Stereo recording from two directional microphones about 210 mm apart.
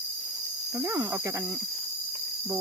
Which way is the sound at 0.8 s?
10° right (ahead or behind).